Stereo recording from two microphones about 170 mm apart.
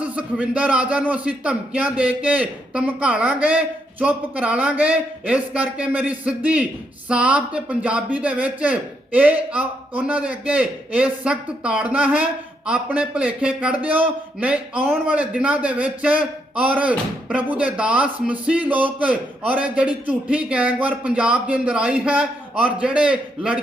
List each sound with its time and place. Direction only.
0.0 s speech: 10° right (ahead or behind)